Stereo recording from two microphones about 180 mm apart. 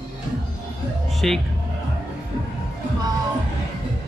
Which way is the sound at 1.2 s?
5° left (ahead or behind).